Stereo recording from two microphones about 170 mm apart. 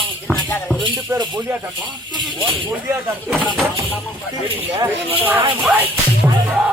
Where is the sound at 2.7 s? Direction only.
10° right (ahead or behind).